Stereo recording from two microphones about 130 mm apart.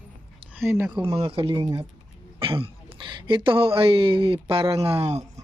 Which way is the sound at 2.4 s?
45° right (ahead or behind).